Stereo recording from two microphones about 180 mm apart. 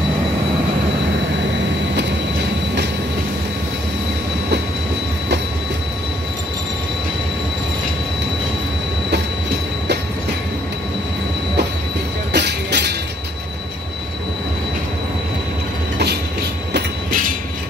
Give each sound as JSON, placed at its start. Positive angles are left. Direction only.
{"t": 12.3, "sound": "train", "side_deg": -70}
{"t": 16.7, "sound": "train", "side_deg": -50}